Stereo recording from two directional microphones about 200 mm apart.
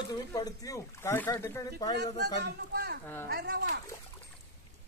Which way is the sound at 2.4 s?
55° right (ahead or behind).